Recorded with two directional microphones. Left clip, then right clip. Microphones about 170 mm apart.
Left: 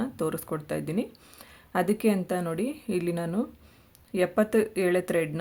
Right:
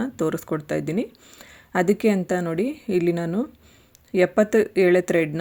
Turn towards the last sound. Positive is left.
turn(degrees=-20)  # may be behind; listen again after turning